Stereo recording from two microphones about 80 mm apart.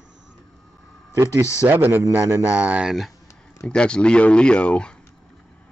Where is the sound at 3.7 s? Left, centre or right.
Centre.